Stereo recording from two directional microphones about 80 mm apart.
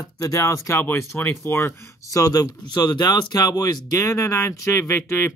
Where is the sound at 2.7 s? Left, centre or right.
Left.